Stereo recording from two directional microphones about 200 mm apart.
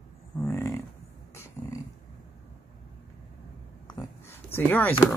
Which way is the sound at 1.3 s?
15° left (ahead or behind).